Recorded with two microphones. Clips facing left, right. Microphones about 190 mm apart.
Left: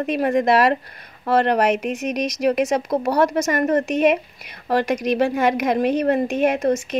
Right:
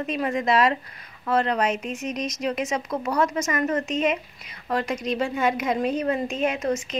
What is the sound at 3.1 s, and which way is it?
Speech, 35° left (ahead or behind).